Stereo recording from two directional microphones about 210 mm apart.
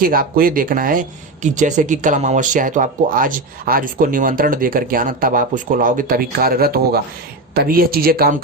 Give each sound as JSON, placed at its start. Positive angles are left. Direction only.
{"t": 0.0, "sound": "speech", "side_deg": -45}